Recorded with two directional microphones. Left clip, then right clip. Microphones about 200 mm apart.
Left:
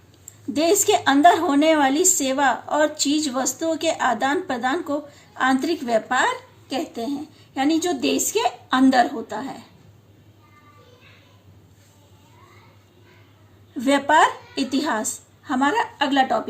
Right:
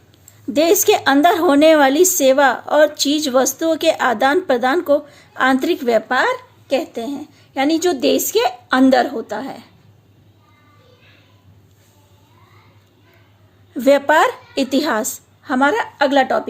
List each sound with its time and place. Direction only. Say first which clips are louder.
0.5 s a woman's voice: right 5 dB; 50° right (ahead or behind)
13.7 s a woman's voice: right 4 dB; 50° right (ahead or behind)